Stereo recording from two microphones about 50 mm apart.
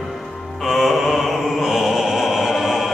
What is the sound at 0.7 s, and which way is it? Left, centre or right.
Mantra, centre.